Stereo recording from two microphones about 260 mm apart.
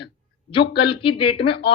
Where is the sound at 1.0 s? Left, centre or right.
Left.